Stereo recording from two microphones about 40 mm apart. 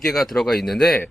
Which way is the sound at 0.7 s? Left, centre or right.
Centre.